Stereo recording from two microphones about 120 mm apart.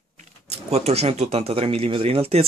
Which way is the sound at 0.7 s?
60° right (ahead or behind).